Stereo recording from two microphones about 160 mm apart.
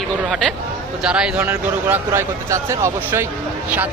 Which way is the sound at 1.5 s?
15° right (ahead or behind).